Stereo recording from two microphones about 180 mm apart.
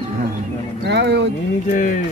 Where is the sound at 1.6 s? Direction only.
45° left (ahead or behind).